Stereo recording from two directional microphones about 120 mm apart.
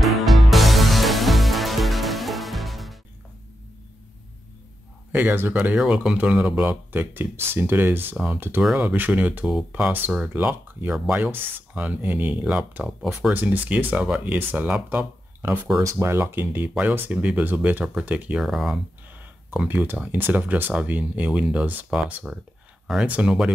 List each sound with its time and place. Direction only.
0.0 s music: centre (ahead or behind)
5.1 s speech: 15° right (ahead or behind)
8.6 s speech: 5° right (ahead or behind)
12.8 s speech: centre (ahead or behind)
13.3 s speech: 15° right (ahead or behind)